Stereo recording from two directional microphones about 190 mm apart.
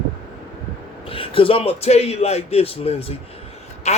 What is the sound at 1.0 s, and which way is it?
Speech, 30° left (ahead or behind).